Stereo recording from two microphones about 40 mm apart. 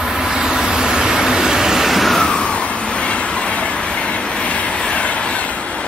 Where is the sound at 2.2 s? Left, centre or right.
Left.